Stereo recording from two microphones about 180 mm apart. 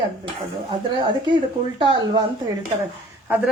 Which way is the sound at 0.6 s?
25° right (ahead or behind).